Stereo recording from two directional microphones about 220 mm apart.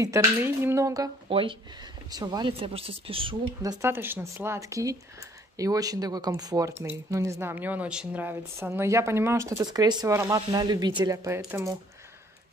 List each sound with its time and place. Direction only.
0.0 s a woman's voice: 15° right (ahead or behind)
3.8 s speech: 10° right (ahead or behind)